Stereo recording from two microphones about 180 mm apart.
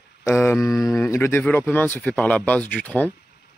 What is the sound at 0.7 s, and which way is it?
Speech, 20° left (ahead or behind).